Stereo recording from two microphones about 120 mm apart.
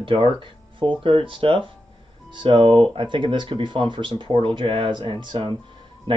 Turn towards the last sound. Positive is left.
turn(degrees=-40)  # may be behind; listen again after turning